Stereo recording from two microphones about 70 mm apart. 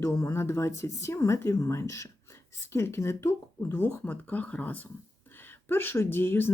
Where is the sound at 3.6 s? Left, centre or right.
Left.